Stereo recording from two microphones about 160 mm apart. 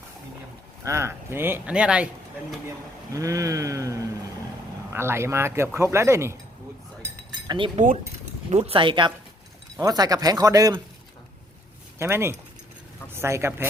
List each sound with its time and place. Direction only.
0.9 s speech: 15° right (ahead or behind)
3.1 s speech: 20° right (ahead or behind)
7.3 s chink: 30° right (ahead or behind)
8.4 s speech: 40° right (ahead or behind); by 10.8 s 20° right (ahead or behind)
11.9 s speech: 15° right (ahead or behind)